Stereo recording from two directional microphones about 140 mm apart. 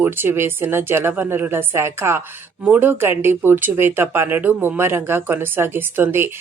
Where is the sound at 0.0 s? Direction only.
15° right (ahead or behind).